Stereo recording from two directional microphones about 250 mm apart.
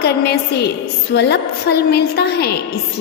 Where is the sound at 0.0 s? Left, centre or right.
Left.